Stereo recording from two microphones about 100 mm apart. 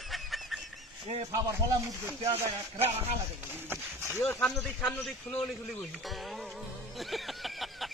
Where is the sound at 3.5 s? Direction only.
20° right (ahead or behind).